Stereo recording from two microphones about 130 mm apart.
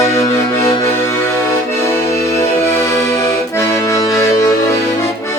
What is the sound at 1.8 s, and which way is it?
Accordion, 20° left (ahead or behind).